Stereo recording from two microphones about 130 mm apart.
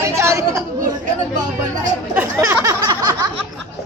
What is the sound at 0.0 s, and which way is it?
Chatter, 20° right (ahead or behind).